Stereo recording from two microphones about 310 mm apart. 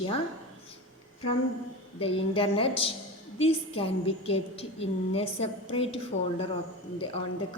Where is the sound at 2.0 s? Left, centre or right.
Centre.